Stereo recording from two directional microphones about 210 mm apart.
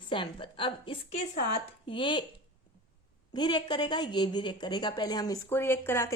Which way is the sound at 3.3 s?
20° left (ahead or behind).